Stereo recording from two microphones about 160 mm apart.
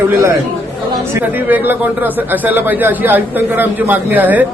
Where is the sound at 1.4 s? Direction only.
10° right (ahead or behind).